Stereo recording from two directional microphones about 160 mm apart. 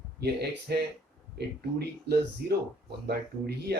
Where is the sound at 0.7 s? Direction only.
75° right (ahead or behind).